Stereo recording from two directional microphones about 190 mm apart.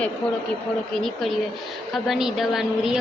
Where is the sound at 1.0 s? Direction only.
Centre (ahead or behind).